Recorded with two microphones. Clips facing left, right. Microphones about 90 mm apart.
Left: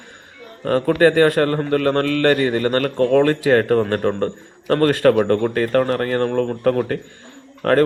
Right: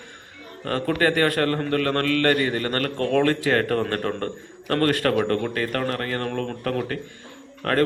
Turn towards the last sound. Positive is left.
turn(degrees=30)  # may be behind; listen again after turning